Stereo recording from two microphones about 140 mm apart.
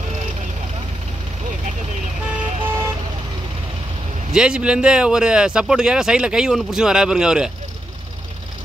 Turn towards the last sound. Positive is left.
turn(degrees=-5)  # may be behind; listen again after turning